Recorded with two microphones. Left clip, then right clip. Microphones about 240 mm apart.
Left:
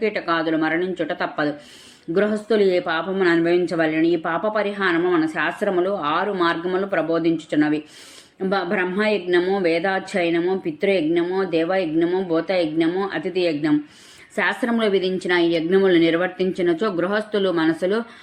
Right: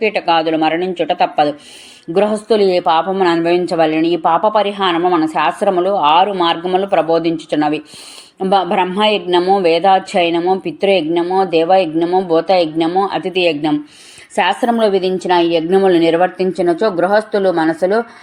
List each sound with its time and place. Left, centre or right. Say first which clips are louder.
0.0 s a woman's voice: right 8 dB; centre